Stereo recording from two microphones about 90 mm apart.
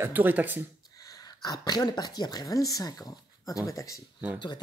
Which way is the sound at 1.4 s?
50° left (ahead or behind).